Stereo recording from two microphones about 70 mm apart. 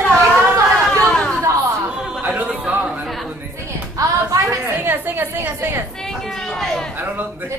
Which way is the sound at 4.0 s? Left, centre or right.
Right.